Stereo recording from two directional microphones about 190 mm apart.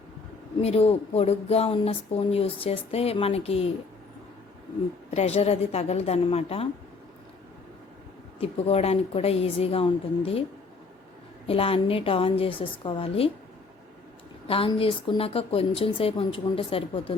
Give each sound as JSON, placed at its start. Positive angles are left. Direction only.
{"t": 0.6, "sound": "speech", "side_deg": 30}
{"t": 5.1, "sound": "speech", "side_deg": 35}
{"t": 8.4, "sound": "speech", "side_deg": 30}
{"t": 11.4, "sound": "a woman's voice", "side_deg": 30}
{"t": 14.4, "sound": "a woman's voice", "side_deg": 30}